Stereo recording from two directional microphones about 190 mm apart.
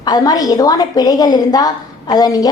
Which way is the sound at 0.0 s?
20° left (ahead or behind).